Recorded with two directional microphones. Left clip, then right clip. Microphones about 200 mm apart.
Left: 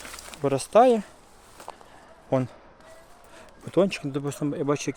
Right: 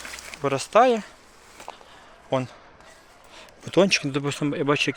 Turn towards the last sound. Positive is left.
turn(degrees=0)  # may be behind; listen again after turning